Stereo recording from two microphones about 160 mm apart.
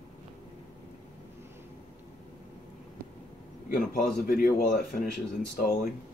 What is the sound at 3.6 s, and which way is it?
A man's voice, 60° left (ahead or behind).